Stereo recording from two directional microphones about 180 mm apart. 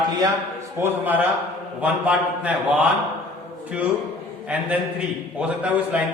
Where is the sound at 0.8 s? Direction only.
10° right (ahead or behind).